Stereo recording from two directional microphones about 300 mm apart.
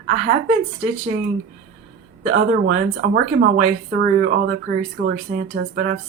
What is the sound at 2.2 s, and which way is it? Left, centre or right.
A woman's voice, right.